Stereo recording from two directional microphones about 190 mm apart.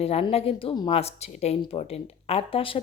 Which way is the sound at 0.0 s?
30° left (ahead or behind).